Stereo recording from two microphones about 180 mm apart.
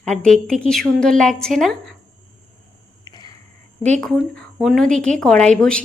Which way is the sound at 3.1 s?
20° left (ahead or behind).